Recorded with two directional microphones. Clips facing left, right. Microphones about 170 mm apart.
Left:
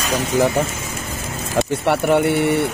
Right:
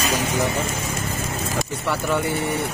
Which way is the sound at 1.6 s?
60° left (ahead or behind).